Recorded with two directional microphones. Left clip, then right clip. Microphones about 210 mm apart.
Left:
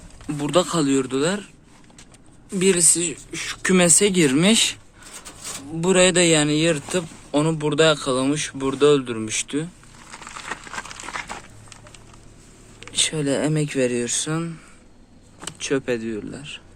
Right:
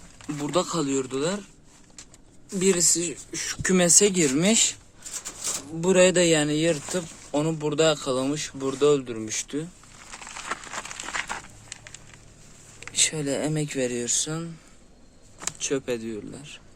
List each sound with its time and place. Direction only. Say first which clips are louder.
0.3 s speech: left 6 dB; centre (ahead or behind)
2.6 s speech: left 3 dB; 5° right (ahead or behind)
5.8 s speech: left 2 dB; 5° right (ahead or behind)
11.0 s crumpling: even; 15° right (ahead or behind)
12.9 s speech: left 4 dB; centre (ahead or behind)
15.5 s speech: left 5 dB; centre (ahead or behind)